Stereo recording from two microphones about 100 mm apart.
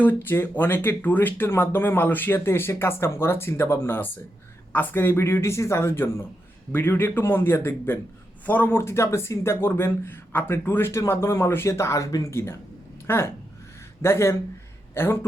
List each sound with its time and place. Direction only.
0.0 s speech: 20° left (ahead or behind)